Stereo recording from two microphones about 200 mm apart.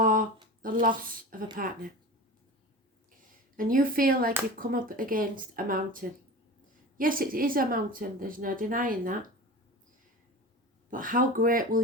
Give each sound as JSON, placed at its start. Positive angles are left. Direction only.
{"t": 0.0, "sound": "a sound", "side_deg": -45}
{"t": 0.6, "sound": "a woman's voice", "side_deg": -45}
{"t": 3.6, "sound": "speech", "side_deg": -45}
{"t": 10.9, "sound": "speech", "side_deg": -45}